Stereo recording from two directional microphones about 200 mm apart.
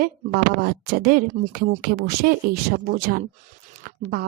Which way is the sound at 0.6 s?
50° right (ahead or behind).